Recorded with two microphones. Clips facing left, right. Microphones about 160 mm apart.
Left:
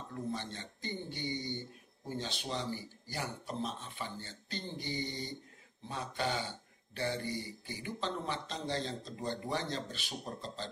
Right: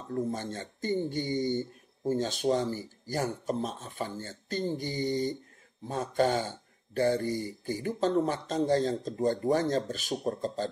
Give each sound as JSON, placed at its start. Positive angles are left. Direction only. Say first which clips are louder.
{"t": 0.1, "sound": "speech", "louder": "right 8 dB", "side_deg": -45}